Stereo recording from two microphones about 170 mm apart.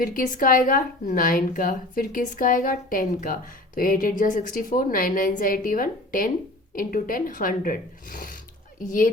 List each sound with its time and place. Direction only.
0.0 s a woman's voice: 55° left (ahead or behind)